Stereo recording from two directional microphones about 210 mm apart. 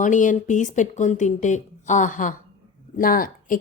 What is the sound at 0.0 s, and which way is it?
A woman's voice, 35° left (ahead or behind).